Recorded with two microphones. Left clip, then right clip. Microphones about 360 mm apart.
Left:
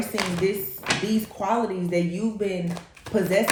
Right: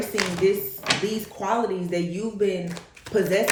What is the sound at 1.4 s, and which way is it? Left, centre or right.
Speech, centre.